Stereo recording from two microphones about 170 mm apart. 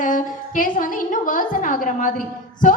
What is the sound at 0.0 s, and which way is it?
A woman's voice, 50° left (ahead or behind).